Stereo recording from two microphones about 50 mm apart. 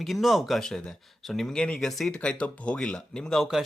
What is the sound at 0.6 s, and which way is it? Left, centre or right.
Speech, centre.